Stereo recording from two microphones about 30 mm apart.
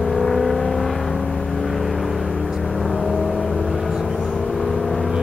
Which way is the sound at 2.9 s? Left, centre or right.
Centre.